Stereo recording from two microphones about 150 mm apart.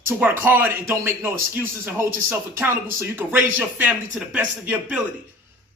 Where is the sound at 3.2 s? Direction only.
10° right (ahead or behind).